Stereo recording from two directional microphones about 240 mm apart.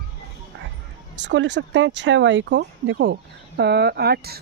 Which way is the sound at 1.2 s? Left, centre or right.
Right.